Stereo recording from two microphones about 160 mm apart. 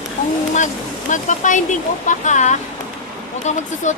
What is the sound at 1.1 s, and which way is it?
A woman's voice, 50° left (ahead or behind).